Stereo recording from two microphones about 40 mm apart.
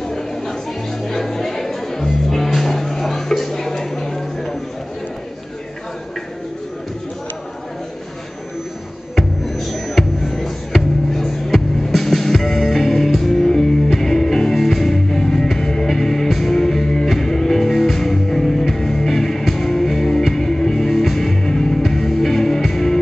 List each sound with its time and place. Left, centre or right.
0.1 s a sound: centre
1.0 s music: centre
9.1 s music: centre